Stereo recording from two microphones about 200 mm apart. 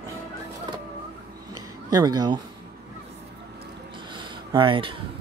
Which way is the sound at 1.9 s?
20° right (ahead or behind).